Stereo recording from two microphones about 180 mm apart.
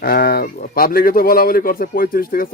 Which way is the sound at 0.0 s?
55° left (ahead or behind).